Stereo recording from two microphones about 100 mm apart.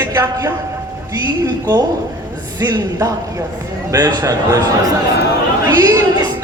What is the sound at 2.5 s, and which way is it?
A man's voice, 40° right (ahead or behind).